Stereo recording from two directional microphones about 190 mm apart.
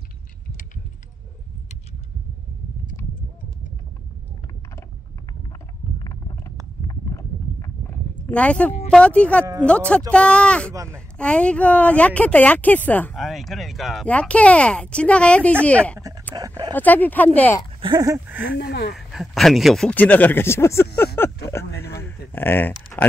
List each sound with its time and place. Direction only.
6.0 s a sound: 15° left (ahead or behind)
6.9 s horse: 15° left (ahead or behind)
8.3 s speech: 5° left (ahead or behind)
10.7 s speech: 15° right (ahead or behind)
11.1 s speech: 5° left (ahead or behind)
16.3 s speech: 20° right (ahead or behind)
16.7 s speech: 10° left (ahead or behind)
17.8 s a sound: 20° right (ahead or behind)
18.4 s speech: 60° left (ahead or behind)
18.9 s speech: centre (ahead or behind)
21.2 s a sound: 10° left (ahead or behind)